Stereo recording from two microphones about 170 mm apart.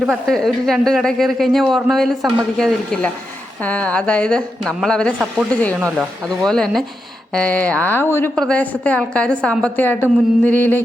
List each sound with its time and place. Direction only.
0.0 s speech: 5° right (ahead or behind)
6.4 s speech: 5° left (ahead or behind)